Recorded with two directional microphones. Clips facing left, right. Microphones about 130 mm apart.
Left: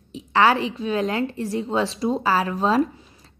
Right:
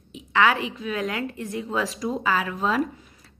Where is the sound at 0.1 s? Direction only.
35° left (ahead or behind).